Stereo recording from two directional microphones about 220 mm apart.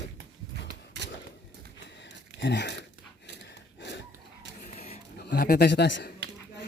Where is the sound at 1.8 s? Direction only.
50° left (ahead or behind).